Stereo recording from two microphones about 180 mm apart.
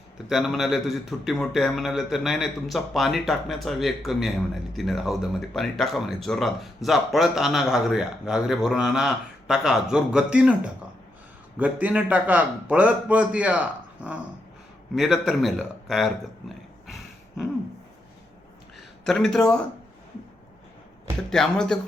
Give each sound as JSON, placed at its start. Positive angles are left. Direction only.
{"t": 0.3, "sound": "a man's voice", "side_deg": 0}
{"t": 16.8, "sound": "a sound", "side_deg": 0}
{"t": 19.0, "sound": "speech", "side_deg": 5}
{"t": 21.2, "sound": "speech", "side_deg": 5}